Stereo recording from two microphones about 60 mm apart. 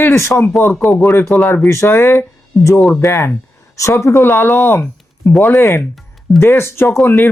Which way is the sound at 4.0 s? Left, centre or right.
Left.